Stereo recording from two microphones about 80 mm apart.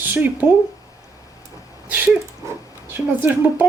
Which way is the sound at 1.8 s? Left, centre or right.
Centre.